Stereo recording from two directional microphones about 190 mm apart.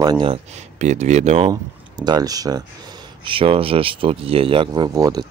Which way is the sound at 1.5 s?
20° right (ahead or behind).